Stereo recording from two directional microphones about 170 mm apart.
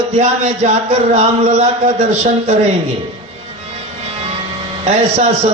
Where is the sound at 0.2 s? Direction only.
40° right (ahead or behind).